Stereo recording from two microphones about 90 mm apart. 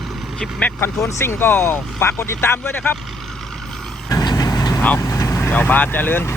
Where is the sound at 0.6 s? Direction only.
20° left (ahead or behind).